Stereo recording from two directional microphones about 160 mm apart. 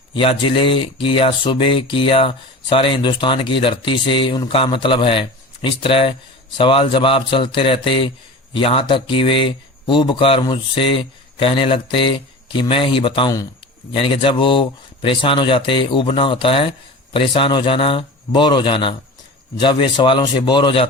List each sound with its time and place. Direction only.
0.1 s a man's voice: 35° left (ahead or behind)